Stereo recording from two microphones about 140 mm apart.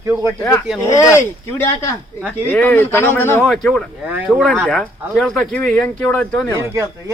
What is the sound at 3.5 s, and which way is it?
Speech, 5° left (ahead or behind).